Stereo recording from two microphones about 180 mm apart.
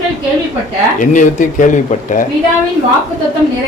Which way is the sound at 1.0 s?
45° left (ahead or behind).